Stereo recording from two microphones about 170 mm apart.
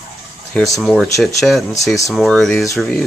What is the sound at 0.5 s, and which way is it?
Speech, centre (ahead or behind).